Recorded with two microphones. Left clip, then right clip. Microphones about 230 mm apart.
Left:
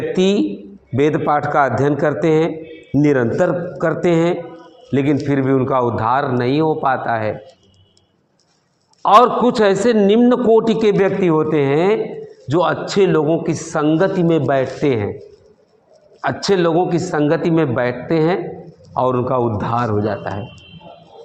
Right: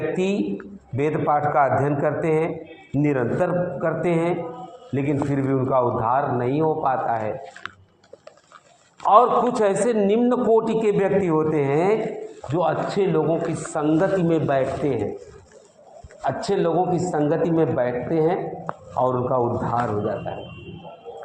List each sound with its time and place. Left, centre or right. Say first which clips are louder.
0.1 s a man's voice: left 7 dB; left
9.0 s a man's voice: left 5 dB; left
16.2 s a man's voice: left 6 dB; left